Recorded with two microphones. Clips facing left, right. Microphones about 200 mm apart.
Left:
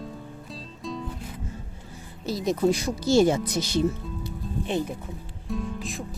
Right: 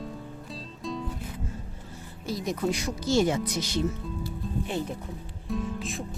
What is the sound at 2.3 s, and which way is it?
Speech, 25° left (ahead or behind).